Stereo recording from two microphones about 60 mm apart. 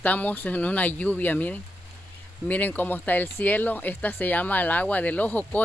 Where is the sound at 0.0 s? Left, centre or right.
Left.